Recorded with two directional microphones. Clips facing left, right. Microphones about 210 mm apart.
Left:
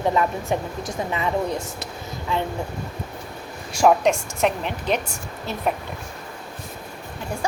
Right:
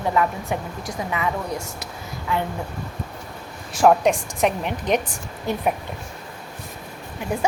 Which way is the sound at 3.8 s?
Centre (ahead or behind).